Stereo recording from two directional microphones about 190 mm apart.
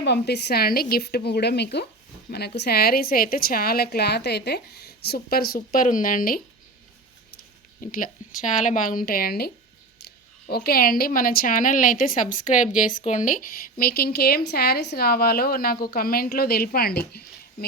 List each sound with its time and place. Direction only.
0.0 s a woman's voice: 60° left (ahead or behind); by 6.4 s 45° left (ahead or behind)
7.8 s a woman's voice: 45° left (ahead or behind)